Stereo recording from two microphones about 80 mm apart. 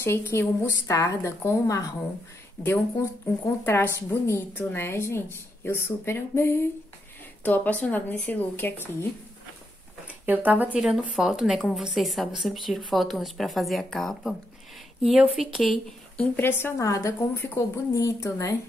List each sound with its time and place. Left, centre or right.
0.0 s a woman's voice: left
7.4 s speech: left
10.2 s speech: right
10.8 s speech: centre
15.0 s a woman's voice: centre
16.3 s a woman's voice: left
16.8 s a woman's voice: left